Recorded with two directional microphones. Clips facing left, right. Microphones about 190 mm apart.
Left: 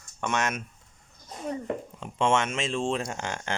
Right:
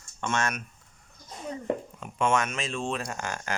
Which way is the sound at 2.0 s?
25° left (ahead or behind).